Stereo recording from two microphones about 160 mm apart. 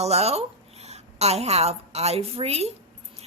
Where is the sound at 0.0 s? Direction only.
40° right (ahead or behind).